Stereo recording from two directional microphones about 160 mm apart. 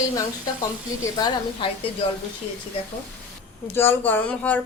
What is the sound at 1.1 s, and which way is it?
Speech, 25° left (ahead or behind).